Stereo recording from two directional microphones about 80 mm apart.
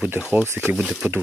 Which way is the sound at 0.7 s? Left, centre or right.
Centre.